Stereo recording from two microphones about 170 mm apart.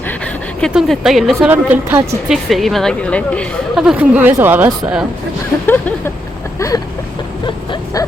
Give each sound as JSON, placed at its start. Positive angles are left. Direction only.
{"t": 0.6, "sound": "a woman's voice", "side_deg": 0}
{"t": 1.5, "sound": "speech", "side_deg": -10}
{"t": 2.3, "sound": "a woman's voice", "side_deg": 0}
{"t": 3.8, "sound": "a woman's voice", "side_deg": -10}
{"t": 6.6, "sound": "vehicle", "side_deg": 20}